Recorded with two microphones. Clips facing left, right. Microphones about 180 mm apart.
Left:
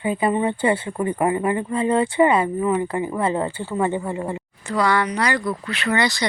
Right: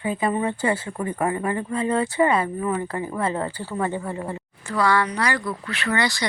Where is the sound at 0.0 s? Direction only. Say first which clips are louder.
Left 3 dB; 25° left (ahead or behind).